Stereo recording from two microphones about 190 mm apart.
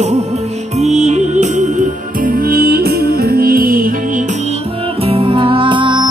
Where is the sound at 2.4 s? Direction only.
50° right (ahead or behind).